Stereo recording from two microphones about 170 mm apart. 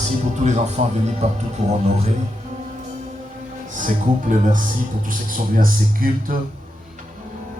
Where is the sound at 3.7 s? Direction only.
50° right (ahead or behind).